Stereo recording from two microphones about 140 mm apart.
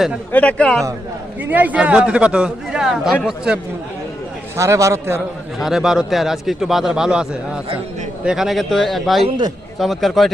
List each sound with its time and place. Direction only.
0.3 s speech: 10° left (ahead or behind)
1.4 s speech: 10° right (ahead or behind)
4.5 s a man's voice: 20° right (ahead or behind)
5.5 s a man's voice: centre (ahead or behind)